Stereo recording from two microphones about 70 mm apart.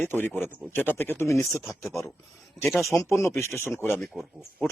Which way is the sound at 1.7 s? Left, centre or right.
Centre.